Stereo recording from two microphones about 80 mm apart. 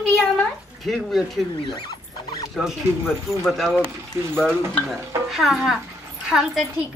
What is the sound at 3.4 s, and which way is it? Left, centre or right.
Speech, centre.